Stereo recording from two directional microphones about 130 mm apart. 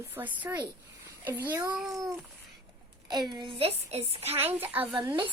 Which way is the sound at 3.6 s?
50° right (ahead or behind).